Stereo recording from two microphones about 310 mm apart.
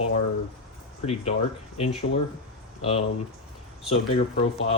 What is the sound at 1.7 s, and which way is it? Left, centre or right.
Speech, centre.